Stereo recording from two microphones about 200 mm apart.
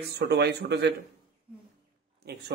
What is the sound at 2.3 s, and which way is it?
Speech, 55° right (ahead or behind).